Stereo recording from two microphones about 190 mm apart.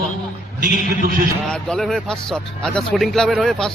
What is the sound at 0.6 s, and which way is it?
Speech, 50° right (ahead or behind).